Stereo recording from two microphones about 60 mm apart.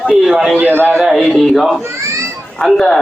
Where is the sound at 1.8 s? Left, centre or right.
Right.